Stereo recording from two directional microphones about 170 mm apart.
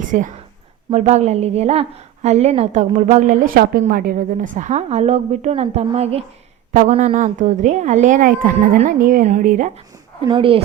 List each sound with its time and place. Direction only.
0.0 s a woman's voice: 50° right (ahead or behind)
10.2 s a woman's voice: 30° right (ahead or behind)